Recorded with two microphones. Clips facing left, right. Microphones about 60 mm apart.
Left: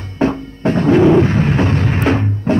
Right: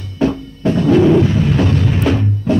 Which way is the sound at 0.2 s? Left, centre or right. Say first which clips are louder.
Even; left.